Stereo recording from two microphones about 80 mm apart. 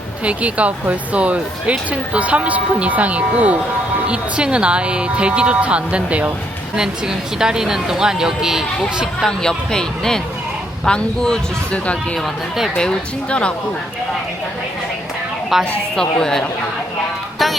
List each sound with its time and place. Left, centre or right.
0.3 s speech: centre
12.1 s speech: centre
12.7 s speech: centre
15.5 s speech: centre
17.4 s music: centre